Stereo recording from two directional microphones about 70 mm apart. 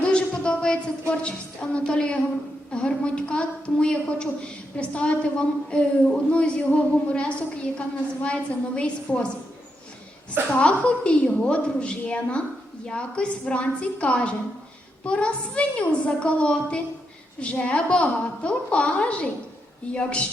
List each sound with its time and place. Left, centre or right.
0.0 s a sound: centre
1.7 s a woman's voice: centre
10.5 s a woman's voice: centre